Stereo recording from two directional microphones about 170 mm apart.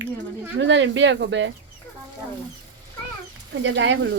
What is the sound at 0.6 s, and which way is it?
Speech, 90° right.